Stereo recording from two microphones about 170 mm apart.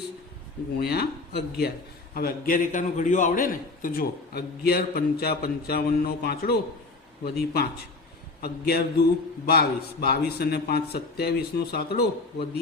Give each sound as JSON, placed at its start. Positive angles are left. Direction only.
{"t": 0.8, "sound": "a man's voice", "side_deg": 70}
{"t": 2.1, "sound": "a man's voice", "side_deg": 60}